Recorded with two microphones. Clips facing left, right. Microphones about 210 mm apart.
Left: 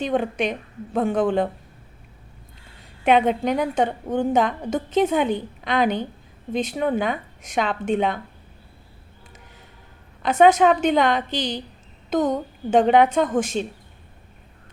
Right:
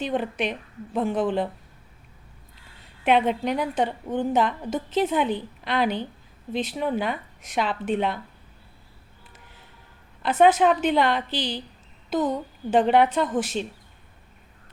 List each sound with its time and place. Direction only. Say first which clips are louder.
0.1 s a woman's voice: left 4 dB; 45° left (ahead or behind)
3.0 s a woman's voice: left 3 dB; 45° left (ahead or behind)
10.2 s a woman's voice: left 3 dB; 45° left (ahead or behind)